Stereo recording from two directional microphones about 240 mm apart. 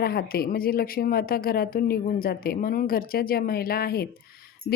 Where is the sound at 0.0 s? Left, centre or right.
Left.